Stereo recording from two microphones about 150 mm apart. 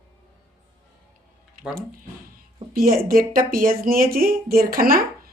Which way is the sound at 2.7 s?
80° right.